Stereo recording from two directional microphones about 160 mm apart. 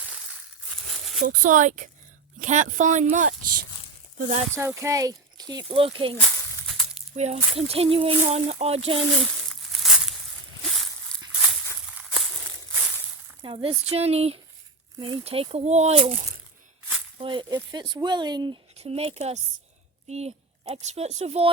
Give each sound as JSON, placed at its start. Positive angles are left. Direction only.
{"t": 1.2, "sound": "speech", "side_deg": -60}
{"t": 4.5, "sound": "speech", "side_deg": -15}
{"t": 6.7, "sound": "crumpling", "side_deg": 0}
{"t": 7.1, "sound": "speech", "side_deg": -45}
{"t": 9.1, "sound": "a sound", "side_deg": 0}
{"t": 13.4, "sound": "speech", "side_deg": -30}
{"t": 17.2, "sound": "speech", "side_deg": -30}
{"t": 18.8, "sound": "a woman's voice", "side_deg": -40}